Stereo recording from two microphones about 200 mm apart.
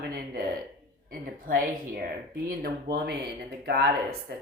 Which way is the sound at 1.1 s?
45° right (ahead or behind).